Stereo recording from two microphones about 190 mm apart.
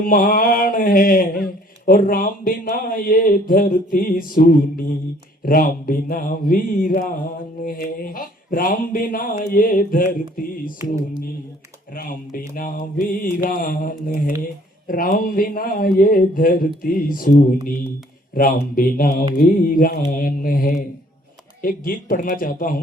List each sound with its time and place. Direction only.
0.0 s speech: 45° left (ahead or behind)
11.9 s speech: 50° left (ahead or behind)